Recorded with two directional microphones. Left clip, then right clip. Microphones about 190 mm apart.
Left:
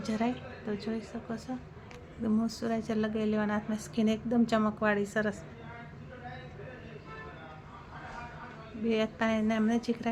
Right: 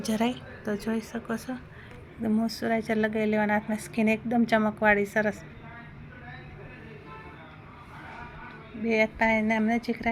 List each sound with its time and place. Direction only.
0.0 s speech: 45° right (ahead or behind)
2.2 s a woman's voice: 10° right (ahead or behind)
8.9 s a woman's voice: 5° left (ahead or behind)